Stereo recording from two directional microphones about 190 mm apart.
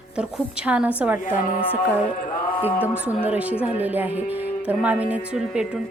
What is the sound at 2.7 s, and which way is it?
Speech, 10° left (ahead or behind).